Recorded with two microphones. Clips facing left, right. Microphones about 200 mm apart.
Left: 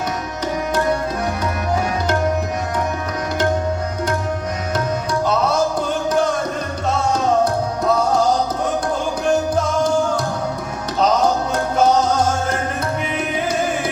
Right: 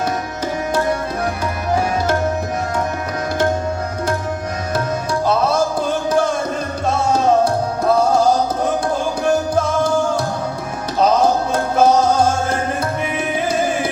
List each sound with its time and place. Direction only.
7.1 s music: 30° right (ahead or behind)
11.0 s music: 30° right (ahead or behind)